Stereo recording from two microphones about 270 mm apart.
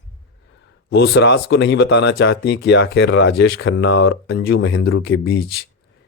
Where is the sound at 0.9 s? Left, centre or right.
Left.